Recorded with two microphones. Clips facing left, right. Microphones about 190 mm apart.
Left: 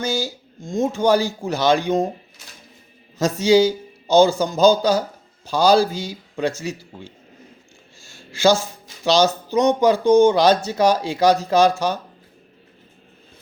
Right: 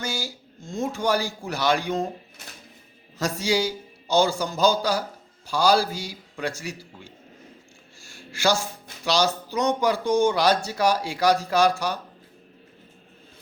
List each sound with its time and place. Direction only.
0.0 s speech: 20° left (ahead or behind)
3.2 s speech: 20° left (ahead or behind)
9.0 s speech: 20° left (ahead or behind)